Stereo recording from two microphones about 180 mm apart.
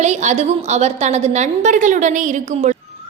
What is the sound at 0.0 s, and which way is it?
A woman's voice, 40° right (ahead or behind).